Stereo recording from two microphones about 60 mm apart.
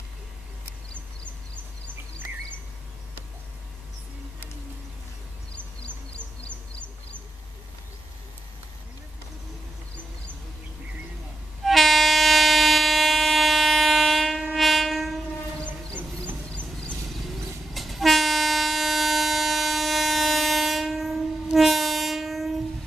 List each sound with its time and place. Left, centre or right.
5.5 s bird: centre
11.6 s train: centre
17.7 s train: centre